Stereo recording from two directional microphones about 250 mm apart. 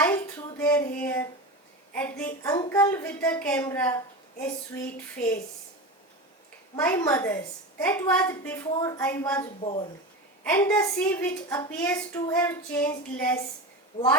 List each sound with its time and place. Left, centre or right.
0.0 s a sound: centre
2.0 s a woman's voice: centre
6.7 s a woman's voice: centre
9.4 s speech: left
10.4 s a woman's voice: centre